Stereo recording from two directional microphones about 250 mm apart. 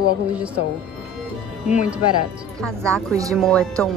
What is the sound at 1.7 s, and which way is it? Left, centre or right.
Speech, centre.